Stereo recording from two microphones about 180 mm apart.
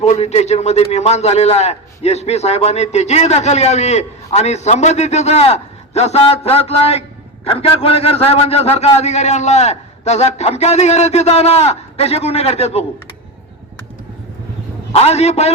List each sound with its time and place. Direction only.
0.0 s a man's voice: 35° left (ahead or behind)
14.9 s a man's voice: 35° left (ahead or behind)